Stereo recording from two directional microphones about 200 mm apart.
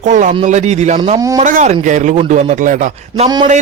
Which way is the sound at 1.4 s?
40° right (ahead or behind).